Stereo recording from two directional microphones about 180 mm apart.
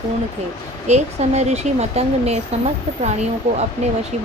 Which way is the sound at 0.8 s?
40° right (ahead or behind).